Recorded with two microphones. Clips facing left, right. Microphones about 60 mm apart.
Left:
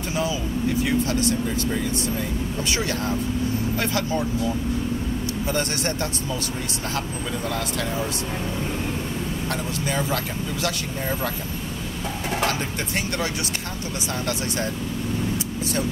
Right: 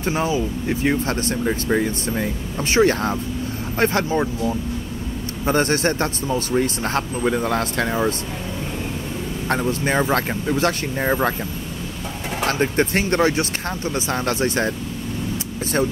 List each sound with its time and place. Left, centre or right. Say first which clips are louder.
0.1 s speech: right 3 dB; right
5.5 s speech: right 9 dB; right
9.5 s speech: right 9 dB; right
12.4 s speech: right 7 dB; right